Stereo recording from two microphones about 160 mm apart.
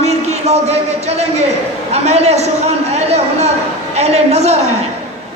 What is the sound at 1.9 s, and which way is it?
A man's voice, 40° right (ahead or behind).